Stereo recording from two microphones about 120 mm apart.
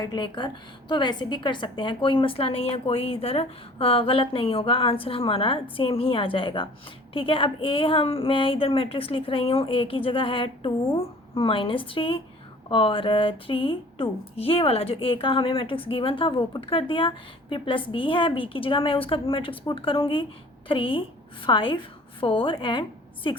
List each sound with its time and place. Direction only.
0.0 s speech: 35° left (ahead or behind)